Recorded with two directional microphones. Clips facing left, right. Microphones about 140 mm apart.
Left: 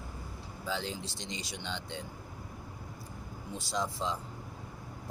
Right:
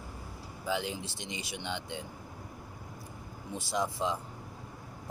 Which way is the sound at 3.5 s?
15° right (ahead or behind).